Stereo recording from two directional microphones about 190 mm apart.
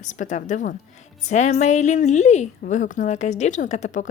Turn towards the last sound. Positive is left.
turn(degrees=40)  # may be behind; listen again after turning